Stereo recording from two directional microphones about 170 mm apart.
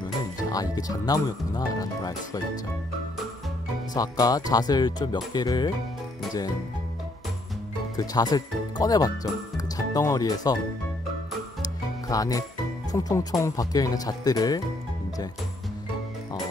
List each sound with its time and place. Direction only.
0.5 s speech: 20° left (ahead or behind)
3.9 s speech: 20° left (ahead or behind)
7.9 s speech: 20° left (ahead or behind)
11.6 s music: 20° left (ahead or behind)
12.9 s speech: 20° left (ahead or behind)